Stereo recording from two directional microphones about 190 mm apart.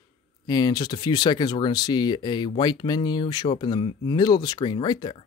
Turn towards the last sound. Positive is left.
turn(degrees=25)  # may be behind; listen again after turning